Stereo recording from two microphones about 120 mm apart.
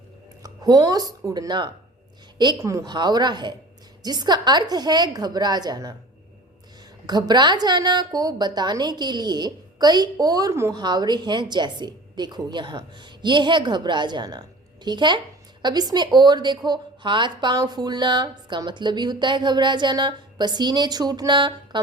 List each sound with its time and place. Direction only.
0.4 s speech: 30° right (ahead or behind)
2.6 s a woman's voice: 25° right (ahead or behind)
2.8 s speech: 40° right (ahead or behind)
7.1 s speech: 35° right (ahead or behind)
10.8 s speech: 35° right (ahead or behind)